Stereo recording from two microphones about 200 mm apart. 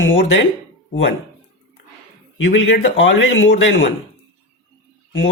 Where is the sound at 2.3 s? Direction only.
70° left (ahead or behind).